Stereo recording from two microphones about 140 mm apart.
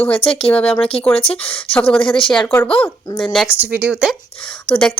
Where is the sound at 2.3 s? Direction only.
5° left (ahead or behind).